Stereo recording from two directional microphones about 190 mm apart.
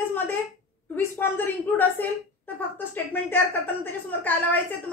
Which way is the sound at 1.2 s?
10° left (ahead or behind).